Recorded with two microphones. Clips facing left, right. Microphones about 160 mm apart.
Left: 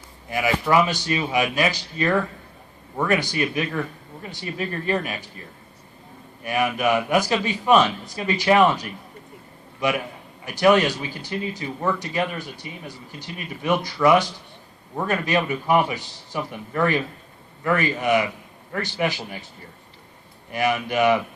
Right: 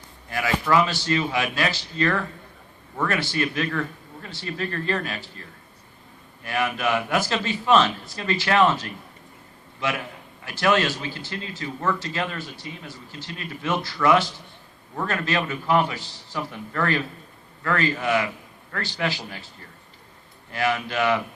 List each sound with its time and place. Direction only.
0.3 s a man's voice: 15° left (ahead or behind)
6.4 s a man's voice: 15° left (ahead or behind)
20.5 s a man's voice: 15° left (ahead or behind)